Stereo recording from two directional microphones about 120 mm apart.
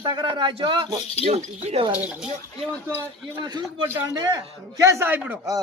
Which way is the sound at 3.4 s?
40° right (ahead or behind).